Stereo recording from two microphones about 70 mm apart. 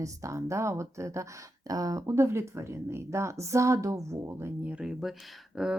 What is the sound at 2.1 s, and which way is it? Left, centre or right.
Speech, right.